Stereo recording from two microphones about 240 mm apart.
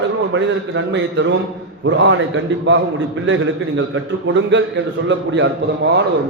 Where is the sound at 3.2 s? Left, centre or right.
Right.